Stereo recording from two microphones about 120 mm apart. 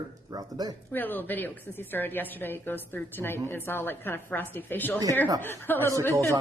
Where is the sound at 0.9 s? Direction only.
15° left (ahead or behind).